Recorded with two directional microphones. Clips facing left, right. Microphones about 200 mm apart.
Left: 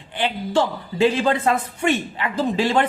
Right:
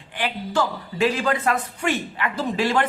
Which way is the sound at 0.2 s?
25° left (ahead or behind).